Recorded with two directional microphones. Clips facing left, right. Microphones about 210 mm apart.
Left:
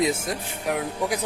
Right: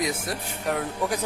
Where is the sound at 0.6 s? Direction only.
10° left (ahead or behind).